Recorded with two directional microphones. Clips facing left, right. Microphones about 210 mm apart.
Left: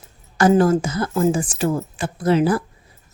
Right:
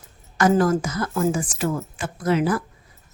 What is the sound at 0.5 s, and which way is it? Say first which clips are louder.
A woman's voice: left 3 dB; 25° left (ahead or behind).